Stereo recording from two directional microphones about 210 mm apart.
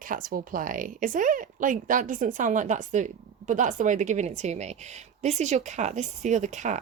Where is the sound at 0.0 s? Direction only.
40° right (ahead or behind).